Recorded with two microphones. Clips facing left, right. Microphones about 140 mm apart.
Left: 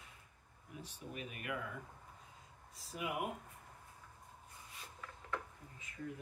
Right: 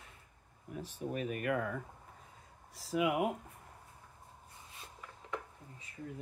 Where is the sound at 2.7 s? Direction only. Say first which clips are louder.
Right 10 dB; 90° right.